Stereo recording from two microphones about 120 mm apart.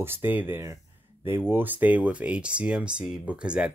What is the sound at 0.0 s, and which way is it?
Speech, 20° right (ahead or behind).